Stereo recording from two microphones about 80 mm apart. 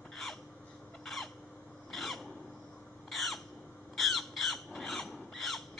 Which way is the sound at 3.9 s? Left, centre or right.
Centre.